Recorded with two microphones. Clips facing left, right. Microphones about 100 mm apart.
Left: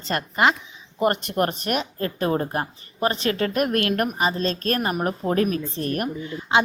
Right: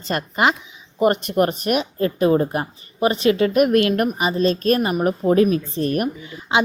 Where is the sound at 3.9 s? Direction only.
5° right (ahead or behind).